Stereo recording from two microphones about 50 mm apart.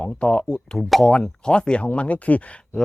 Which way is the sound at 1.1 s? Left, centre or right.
Centre.